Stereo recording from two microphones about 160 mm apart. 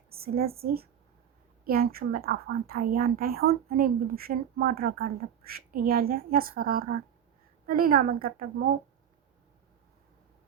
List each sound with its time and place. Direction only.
0.1 s a woman's voice: 70° right (ahead or behind)